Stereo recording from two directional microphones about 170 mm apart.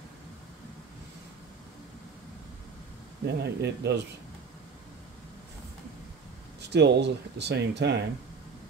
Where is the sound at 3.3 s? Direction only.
80° right.